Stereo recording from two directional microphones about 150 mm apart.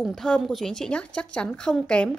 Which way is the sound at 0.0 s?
Centre (ahead or behind).